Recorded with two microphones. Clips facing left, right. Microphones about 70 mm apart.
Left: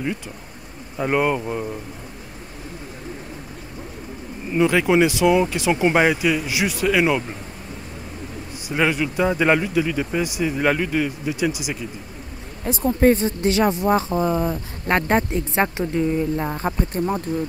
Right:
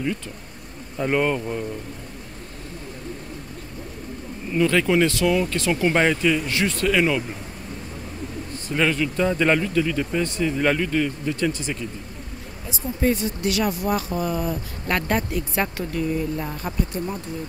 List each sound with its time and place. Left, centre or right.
0.9 s speech: centre
4.5 s speech: centre
8.6 s speech: centre
12.6 s speech: left
13.1 s speech: left